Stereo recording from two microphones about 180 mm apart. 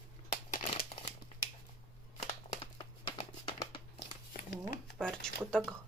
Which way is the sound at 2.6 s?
30° left (ahead or behind).